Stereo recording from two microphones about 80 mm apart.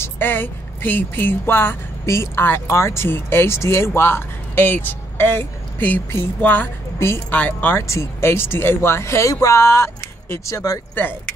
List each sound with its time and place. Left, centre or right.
0.0 s speech: left
7.0 s speech: left
7.3 s speech: centre
7.7 s speech: left